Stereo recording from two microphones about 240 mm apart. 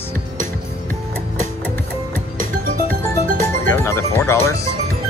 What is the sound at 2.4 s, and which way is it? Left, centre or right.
Music, right.